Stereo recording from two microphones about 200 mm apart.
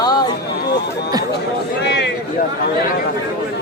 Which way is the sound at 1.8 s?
55° left (ahead or behind).